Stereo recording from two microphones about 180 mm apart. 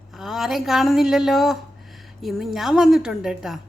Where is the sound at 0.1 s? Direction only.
Centre (ahead or behind).